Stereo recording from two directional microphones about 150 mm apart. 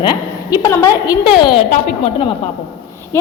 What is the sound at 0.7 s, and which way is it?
Speech, 20° left (ahead or behind).